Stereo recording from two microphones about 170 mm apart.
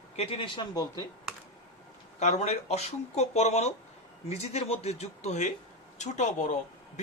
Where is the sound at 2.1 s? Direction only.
40° left (ahead or behind).